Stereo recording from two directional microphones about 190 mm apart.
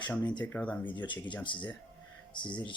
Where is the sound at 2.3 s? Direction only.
25° left (ahead or behind).